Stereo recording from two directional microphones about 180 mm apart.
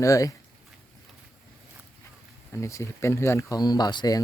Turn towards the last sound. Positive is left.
turn(degrees=20)  # may be behind; listen again after turning